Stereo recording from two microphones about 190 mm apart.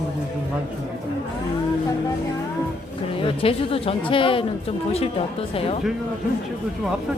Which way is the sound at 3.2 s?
30° left (ahead or behind).